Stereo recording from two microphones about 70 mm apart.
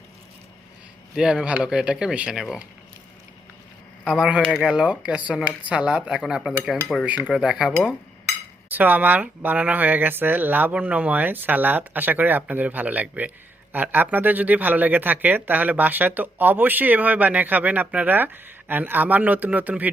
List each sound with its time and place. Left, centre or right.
1.1 s speech: centre
4.0 s speech: centre
8.7 s speech: right